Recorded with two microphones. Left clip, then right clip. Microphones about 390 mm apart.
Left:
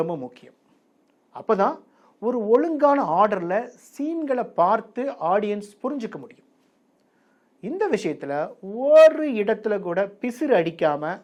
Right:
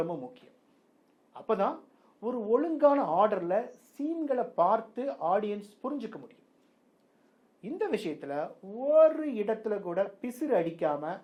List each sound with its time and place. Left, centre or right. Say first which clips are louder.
0.0 s a woman's voice: left 7 dB; left
7.6 s speech: left 8 dB; left